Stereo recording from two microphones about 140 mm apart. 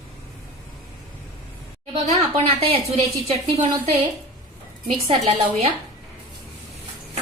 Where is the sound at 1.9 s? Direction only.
45° right (ahead or behind).